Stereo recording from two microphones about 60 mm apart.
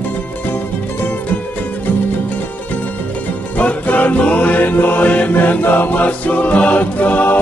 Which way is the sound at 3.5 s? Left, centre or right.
Left.